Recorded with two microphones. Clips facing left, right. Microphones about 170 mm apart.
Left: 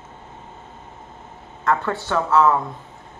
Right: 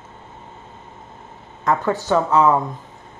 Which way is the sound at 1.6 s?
15° right (ahead or behind).